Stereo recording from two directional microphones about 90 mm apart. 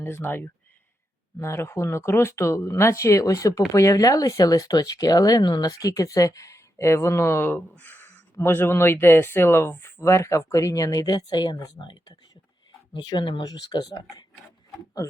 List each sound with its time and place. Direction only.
0.0 s speech: 25° left (ahead or behind); by 14.3 s 55° left (ahead or behind)